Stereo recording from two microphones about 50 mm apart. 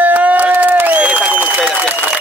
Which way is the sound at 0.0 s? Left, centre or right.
Right.